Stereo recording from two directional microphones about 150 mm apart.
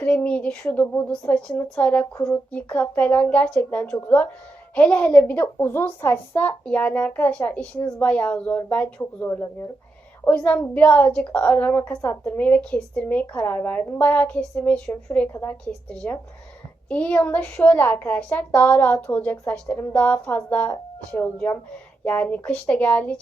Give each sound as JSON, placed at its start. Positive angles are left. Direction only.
{"t": 0.0, "sound": "a woman's voice", "side_deg": 10}